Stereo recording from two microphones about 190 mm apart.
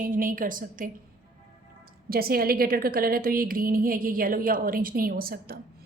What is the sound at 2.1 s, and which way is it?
A woman's voice, 50° right (ahead or behind).